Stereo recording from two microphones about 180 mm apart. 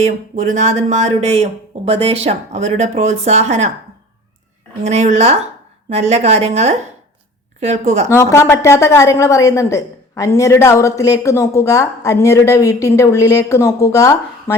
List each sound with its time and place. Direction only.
0.3 s speech: 45° right (ahead or behind)
4.8 s speech: 40° right (ahead or behind)
8.1 s a woman's voice: 15° left (ahead or behind)